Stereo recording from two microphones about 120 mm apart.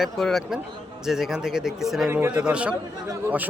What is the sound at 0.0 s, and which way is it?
Speech, centre (ahead or behind).